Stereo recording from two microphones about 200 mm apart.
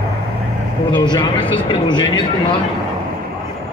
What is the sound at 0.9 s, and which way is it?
Speech, 20° left (ahead or behind).